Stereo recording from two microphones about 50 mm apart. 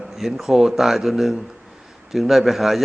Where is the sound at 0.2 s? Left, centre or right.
Centre.